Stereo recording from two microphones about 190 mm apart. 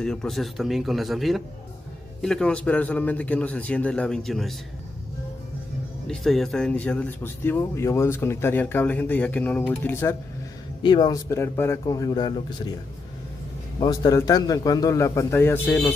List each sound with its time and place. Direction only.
0.0 s speech: 5° left (ahead or behind)
6.0 s speech: centre (ahead or behind)
10.8 s a man's voice: 25° left (ahead or behind)
13.7 s speech: 20° left (ahead or behind)